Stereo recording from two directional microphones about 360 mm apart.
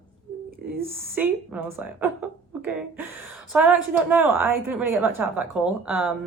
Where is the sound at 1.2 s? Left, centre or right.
Centre.